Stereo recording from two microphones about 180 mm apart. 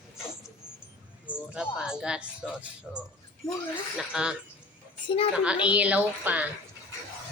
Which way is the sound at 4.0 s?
5° right (ahead or behind).